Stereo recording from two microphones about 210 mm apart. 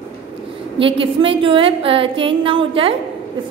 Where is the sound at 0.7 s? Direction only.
25° right (ahead or behind).